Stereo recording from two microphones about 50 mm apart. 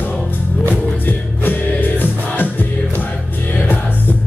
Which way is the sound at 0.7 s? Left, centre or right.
Left.